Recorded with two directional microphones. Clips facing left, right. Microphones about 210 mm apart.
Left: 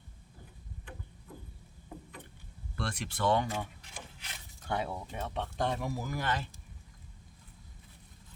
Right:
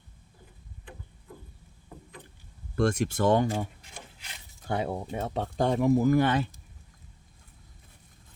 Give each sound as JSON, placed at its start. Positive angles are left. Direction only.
{"t": 2.7, "sound": "speech", "side_deg": -45}
{"t": 3.4, "sound": "speech", "side_deg": -30}
{"t": 4.7, "sound": "speech", "side_deg": -45}